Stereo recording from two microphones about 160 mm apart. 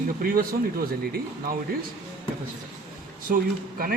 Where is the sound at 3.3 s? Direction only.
60° right (ahead or behind).